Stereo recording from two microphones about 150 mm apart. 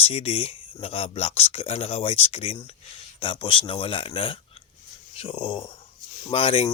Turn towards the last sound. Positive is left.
turn(degrees=40)  # may be behind; listen again after turning